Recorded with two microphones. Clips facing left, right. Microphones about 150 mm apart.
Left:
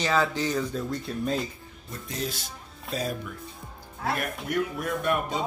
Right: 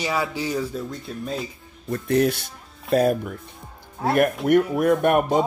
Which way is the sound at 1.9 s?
65° right (ahead or behind).